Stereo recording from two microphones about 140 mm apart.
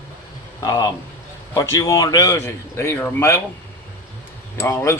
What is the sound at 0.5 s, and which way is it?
A man's voice, 30° left (ahead or behind).